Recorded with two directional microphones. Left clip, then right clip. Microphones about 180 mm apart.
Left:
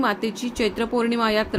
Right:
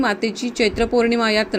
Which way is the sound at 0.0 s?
15° right (ahead or behind).